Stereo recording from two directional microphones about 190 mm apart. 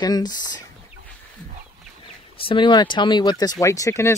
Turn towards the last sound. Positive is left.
turn(degrees=15)  # may be behind; listen again after turning